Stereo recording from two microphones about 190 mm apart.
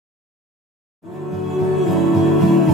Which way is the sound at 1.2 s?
Centre (ahead or behind).